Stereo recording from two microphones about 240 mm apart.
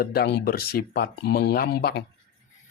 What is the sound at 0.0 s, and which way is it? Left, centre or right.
Speech, left.